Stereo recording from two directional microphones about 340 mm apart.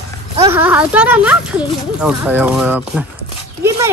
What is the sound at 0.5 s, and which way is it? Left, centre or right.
Speech, centre.